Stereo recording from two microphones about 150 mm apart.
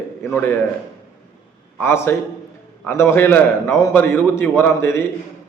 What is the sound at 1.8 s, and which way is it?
A man's voice, 15° left (ahead or behind).